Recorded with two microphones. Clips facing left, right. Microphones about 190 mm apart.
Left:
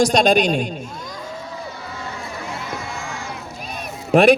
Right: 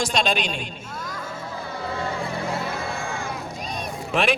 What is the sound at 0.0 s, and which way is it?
Speech, 40° left (ahead or behind).